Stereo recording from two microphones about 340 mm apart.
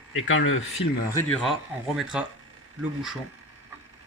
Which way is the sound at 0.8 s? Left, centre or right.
Centre.